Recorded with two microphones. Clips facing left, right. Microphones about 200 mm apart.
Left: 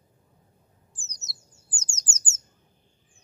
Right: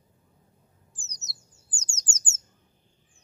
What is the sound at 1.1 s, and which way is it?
Bird, 20° right (ahead or behind).